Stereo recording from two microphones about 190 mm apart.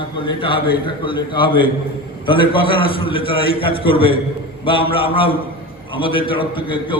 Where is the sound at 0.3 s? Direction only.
25° left (ahead or behind).